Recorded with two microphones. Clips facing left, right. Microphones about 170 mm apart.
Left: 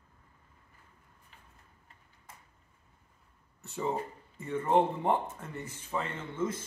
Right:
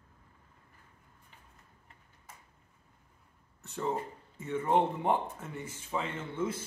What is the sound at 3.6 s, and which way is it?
Speech, centre (ahead or behind).